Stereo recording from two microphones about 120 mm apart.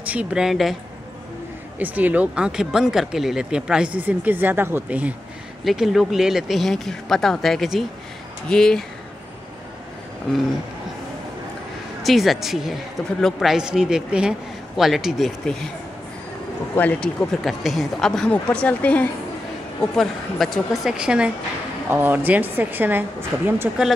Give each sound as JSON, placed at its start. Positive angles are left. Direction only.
{"t": 0.0, "sound": "speech", "side_deg": -10}
{"t": 1.8, "sound": "speech", "side_deg": -15}
{"t": 5.6, "sound": "speech", "side_deg": 0}
{"t": 12.0, "sound": "speech", "side_deg": 0}
{"t": 16.7, "sound": "a woman's voice", "side_deg": 10}
{"t": 17.4, "sound": "a woman's voice", "side_deg": 0}
{"t": 21.8, "sound": "speech", "side_deg": -20}